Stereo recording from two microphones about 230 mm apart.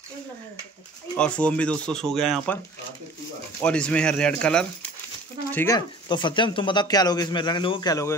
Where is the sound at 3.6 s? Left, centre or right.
Centre.